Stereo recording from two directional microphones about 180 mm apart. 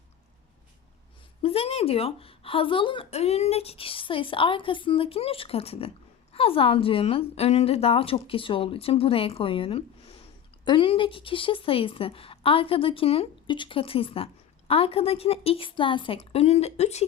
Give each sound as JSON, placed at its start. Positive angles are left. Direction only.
{"t": 1.4, "sound": "speech", "side_deg": 30}